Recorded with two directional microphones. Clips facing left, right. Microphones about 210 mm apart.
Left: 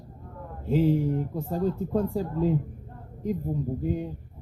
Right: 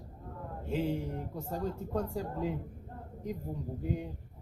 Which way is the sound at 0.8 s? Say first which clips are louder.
Left 10 dB; centre (ahead or behind).